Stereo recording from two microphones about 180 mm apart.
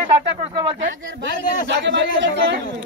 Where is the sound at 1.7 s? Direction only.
75° right (ahead or behind).